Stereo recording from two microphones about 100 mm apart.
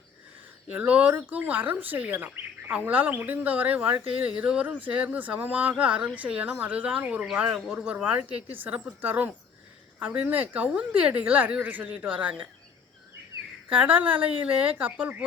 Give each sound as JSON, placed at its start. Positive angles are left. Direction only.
{"t": 0.7, "sound": "speech", "side_deg": -15}
{"t": 13.7, "sound": "speech", "side_deg": -15}